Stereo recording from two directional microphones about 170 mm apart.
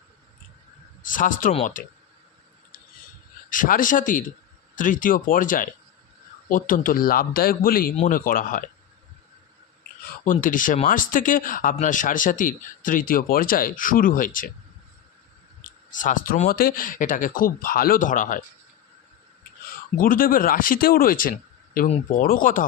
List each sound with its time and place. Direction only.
1.0 s speech: 50° left (ahead or behind)
3.5 s a man's voice: 50° left (ahead or behind)
10.2 s a man's voice: 50° left (ahead or behind)
15.9 s speech: 50° left (ahead or behind)
20.0 s a man's voice: 55° left (ahead or behind)